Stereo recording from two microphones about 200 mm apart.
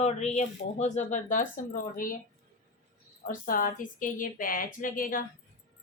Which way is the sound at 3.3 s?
45° left (ahead or behind).